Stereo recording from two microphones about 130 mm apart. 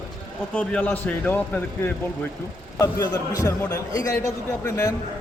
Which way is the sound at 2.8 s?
30° left (ahead or behind).